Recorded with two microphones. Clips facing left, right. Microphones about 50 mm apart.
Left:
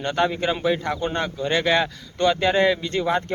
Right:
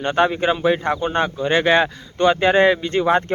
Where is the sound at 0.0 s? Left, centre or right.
Right.